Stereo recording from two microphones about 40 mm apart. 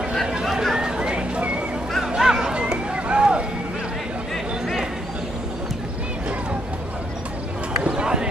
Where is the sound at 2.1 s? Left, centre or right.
Centre.